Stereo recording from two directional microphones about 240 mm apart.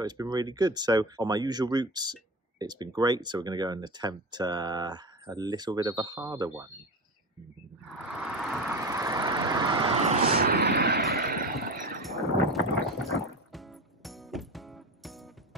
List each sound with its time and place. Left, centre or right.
0.0 s speech: centre
8.8 s vehicle: centre
10.3 s artillery fire: right
12.0 s a sound: centre
12.4 s music: centre